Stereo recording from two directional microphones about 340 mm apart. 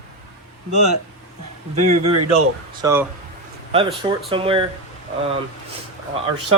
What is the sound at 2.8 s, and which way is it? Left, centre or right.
Speech, centre.